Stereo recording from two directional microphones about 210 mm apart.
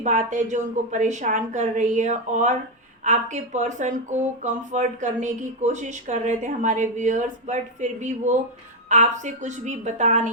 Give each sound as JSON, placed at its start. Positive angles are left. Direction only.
{"t": 0.0, "sound": "speech", "side_deg": -35}